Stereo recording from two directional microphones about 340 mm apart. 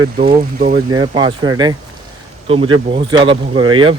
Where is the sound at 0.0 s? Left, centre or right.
Centre.